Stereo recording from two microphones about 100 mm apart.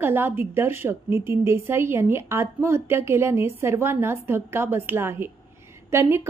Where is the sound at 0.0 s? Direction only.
20° right (ahead or behind).